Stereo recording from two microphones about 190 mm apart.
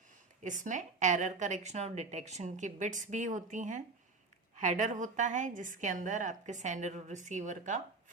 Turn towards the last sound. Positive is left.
turn(degrees=-40)  # may be behind; listen again after turning